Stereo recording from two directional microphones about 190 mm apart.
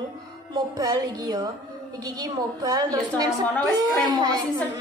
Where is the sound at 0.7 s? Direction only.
20° right (ahead or behind).